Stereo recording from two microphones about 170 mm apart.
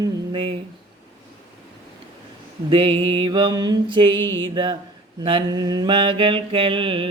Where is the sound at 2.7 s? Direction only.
35° right (ahead or behind).